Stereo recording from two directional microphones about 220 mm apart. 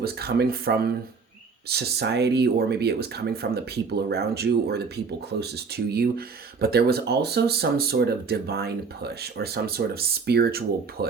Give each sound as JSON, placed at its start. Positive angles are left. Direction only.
{"t": 0.0, "sound": "speech", "side_deg": -45}